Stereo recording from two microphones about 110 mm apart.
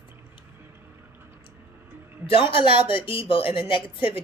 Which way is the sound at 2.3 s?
55° left (ahead or behind).